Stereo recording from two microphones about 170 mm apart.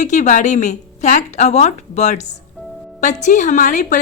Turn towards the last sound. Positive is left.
turn(degrees=50)  # may be behind; listen again after turning